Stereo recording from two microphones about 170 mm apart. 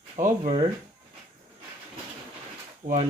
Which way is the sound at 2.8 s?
50° right (ahead or behind).